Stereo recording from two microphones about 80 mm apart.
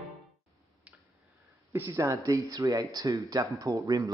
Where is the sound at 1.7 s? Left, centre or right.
Right.